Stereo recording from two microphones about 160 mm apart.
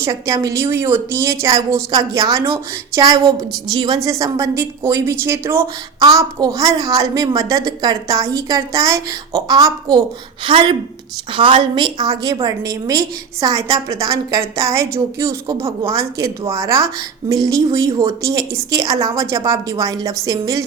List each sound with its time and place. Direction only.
0.0 s a woman's voice: 20° right (ahead or behind)